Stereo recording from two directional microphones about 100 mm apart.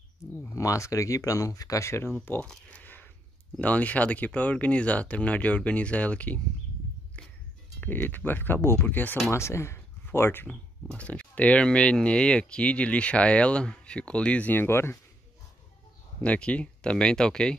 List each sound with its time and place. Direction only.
0.2 s speech: 30° left (ahead or behind)
2.4 s speech: 5° left (ahead or behind)
2.8 s a sound: 15° left (ahead or behind)
3.5 s speech: 15° left (ahead or behind)
7.2 s music: 10° left (ahead or behind)
7.8 s speech: 20° left (ahead or behind)
10.5 s speech: 10° left (ahead or behind)
16.2 s speech: 10° left (ahead or behind)